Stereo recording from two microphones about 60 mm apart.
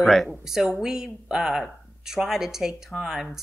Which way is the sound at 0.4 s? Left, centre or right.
Centre.